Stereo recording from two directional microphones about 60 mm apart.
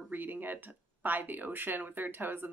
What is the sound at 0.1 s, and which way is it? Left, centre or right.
Speech, right.